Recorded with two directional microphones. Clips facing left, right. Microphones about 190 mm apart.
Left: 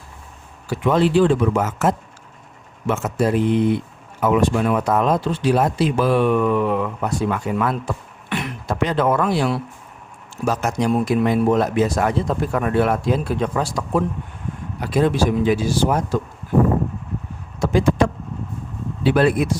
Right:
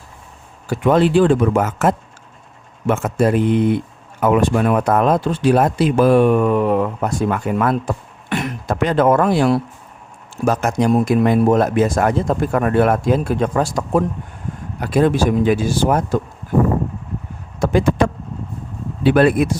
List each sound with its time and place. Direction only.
0.7 s speech: 50° right (ahead or behind)
17.6 s a sound: 55° right (ahead or behind)
19.0 s speech: 55° right (ahead or behind)